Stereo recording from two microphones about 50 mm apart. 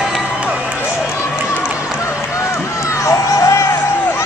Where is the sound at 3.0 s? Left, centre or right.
Left.